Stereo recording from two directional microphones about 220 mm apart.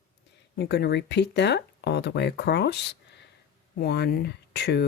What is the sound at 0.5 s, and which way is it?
Speech, 45° left (ahead or behind).